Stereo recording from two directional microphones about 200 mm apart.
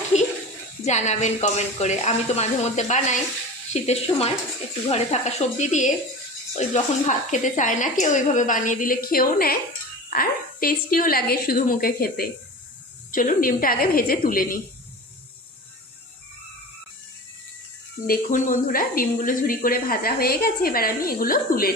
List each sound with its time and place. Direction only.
0.9 s a woman's voice: 35° left (ahead or behind)
18.0 s speech: 45° left (ahead or behind)